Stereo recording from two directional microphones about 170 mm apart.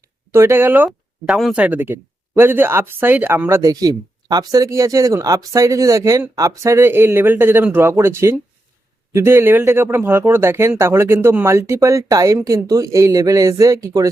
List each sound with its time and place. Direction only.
0.3 s speech: 15° right (ahead or behind)